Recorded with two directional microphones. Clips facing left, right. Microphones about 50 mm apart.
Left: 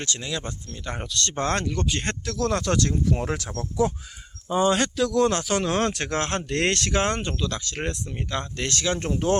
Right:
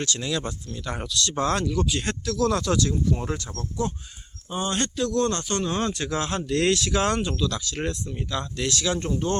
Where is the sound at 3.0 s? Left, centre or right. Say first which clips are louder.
Left 1 dB; left.